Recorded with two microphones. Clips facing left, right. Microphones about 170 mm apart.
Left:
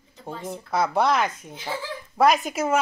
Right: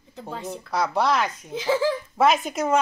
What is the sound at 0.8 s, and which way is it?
Speech, 55° left (ahead or behind).